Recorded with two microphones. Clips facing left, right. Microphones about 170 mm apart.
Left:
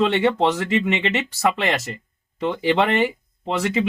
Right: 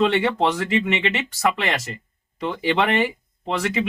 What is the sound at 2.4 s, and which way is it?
Speech, 30° left (ahead or behind).